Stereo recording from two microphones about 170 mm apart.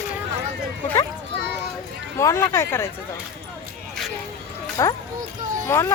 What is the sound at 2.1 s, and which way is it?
Speech, 15° left (ahead or behind).